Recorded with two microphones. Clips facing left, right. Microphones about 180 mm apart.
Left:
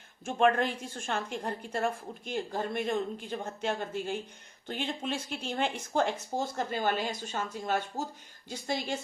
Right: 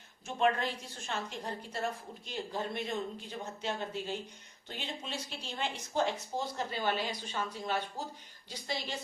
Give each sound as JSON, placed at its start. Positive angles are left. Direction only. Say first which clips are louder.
{"t": 0.3, "sound": "a woman's voice", "louder": "left 5 dB", "side_deg": 50}